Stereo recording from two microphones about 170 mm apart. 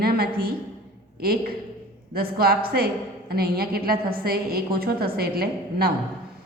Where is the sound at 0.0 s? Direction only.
65° right (ahead or behind).